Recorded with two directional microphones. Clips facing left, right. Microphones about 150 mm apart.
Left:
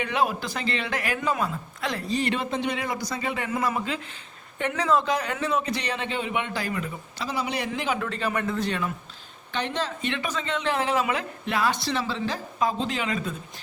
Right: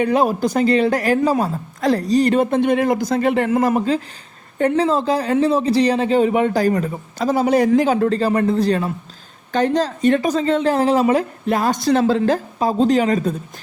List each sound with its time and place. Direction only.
0.0 s speech: 40° right (ahead or behind)
4.7 s speech: 30° right (ahead or behind)